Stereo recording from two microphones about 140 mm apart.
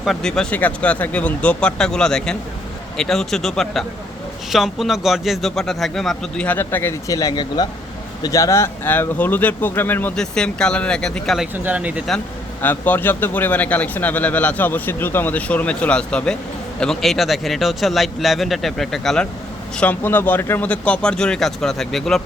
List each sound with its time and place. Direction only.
0.0 s a man's voice: 5° left (ahead or behind)
11.5 s speech: 10° right (ahead or behind)
12.6 s a man's voice: 10° left (ahead or behind)